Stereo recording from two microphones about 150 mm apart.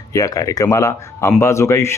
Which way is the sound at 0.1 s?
20° left (ahead or behind).